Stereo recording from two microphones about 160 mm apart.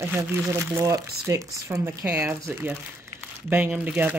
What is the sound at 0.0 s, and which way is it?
Speech, 15° right (ahead or behind).